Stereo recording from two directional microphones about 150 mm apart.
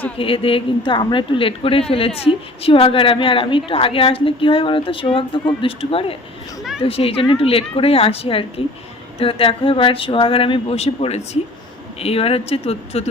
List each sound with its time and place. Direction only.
0.2 s a woman's voice: 35° left (ahead or behind)